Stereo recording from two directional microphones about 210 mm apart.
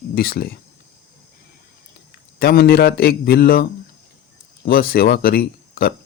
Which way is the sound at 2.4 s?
45° left (ahead or behind).